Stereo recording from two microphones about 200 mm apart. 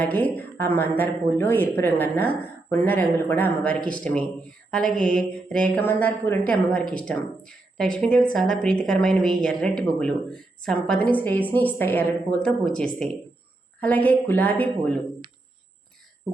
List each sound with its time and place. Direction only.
0.0 s speech: 10° left (ahead or behind)